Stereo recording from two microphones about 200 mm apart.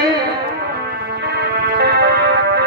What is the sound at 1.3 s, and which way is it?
Music, 55° right (ahead or behind).